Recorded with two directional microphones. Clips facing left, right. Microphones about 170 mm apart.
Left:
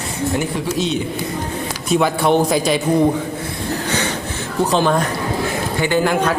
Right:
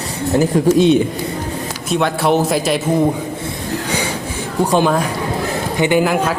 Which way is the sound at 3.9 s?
10° right (ahead or behind).